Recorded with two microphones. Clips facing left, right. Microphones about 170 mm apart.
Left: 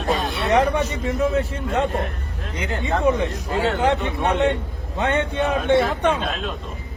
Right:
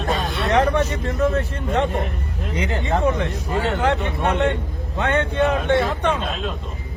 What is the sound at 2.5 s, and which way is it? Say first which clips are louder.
Speech: right 1 dB; 20° right (ahead or behind).